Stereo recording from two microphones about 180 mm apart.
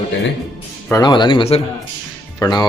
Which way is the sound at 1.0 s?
25° left (ahead or behind).